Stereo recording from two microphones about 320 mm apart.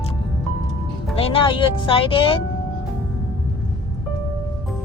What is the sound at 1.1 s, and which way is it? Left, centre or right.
A woman's voice, centre.